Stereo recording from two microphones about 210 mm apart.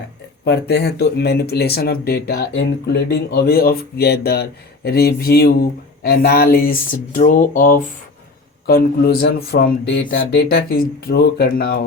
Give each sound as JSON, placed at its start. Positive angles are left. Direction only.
{"t": 0.4, "sound": "speech", "side_deg": 55}